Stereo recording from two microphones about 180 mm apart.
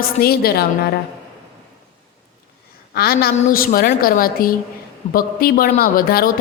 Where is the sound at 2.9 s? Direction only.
60° left (ahead or behind).